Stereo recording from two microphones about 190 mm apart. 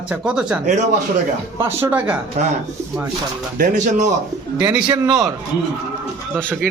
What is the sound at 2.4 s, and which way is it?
Speech, 40° right (ahead or behind).